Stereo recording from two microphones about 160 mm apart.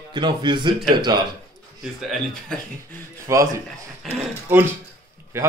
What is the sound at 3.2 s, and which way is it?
A man's voice, 20° right (ahead or behind).